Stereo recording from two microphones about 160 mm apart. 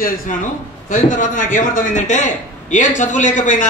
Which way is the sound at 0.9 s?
55° left (ahead or behind).